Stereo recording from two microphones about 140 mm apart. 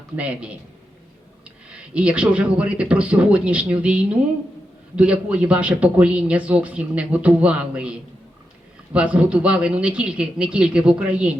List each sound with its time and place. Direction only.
0.2 s a man's voice: 10° right (ahead or behind)
1.7 s a man's voice: 10° right (ahead or behind)